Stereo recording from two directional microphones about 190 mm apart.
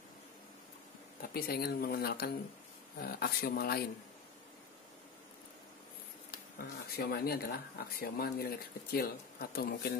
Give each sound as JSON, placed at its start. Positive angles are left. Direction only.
{"t": 1.3, "sound": "speech", "side_deg": 55}
{"t": 6.3, "sound": "speech", "side_deg": 55}